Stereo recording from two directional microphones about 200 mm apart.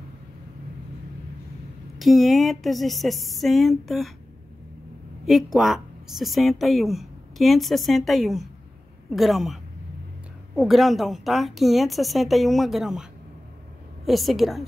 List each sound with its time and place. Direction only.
2.0 s a woman's voice: centre (ahead or behind)
5.2 s a woman's voice: centre (ahead or behind)
14.0 s a woman's voice: centre (ahead or behind)